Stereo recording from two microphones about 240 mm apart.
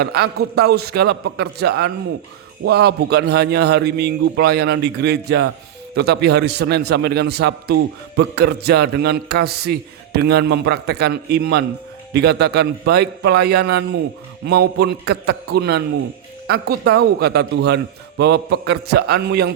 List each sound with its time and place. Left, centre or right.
0.0 s a man's voice: right